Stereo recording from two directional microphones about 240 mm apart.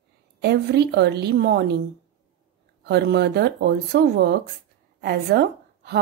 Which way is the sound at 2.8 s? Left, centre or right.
Right.